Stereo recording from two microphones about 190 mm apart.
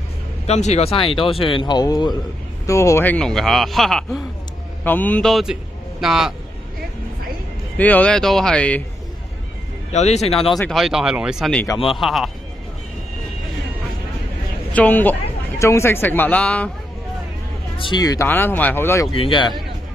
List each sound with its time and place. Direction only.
0.5 s a man's voice: 35° left (ahead or behind); by 6.3 s centre (ahead or behind)
7.7 s speech: 10° left (ahead or behind)
9.9 s speech: 35° left (ahead or behind)
10.5 s speech: centre (ahead or behind)
14.7 s speech: 10° left (ahead or behind)
17.7 s speech: 25° left (ahead or behind)
19.1 s speech: 25° left (ahead or behind)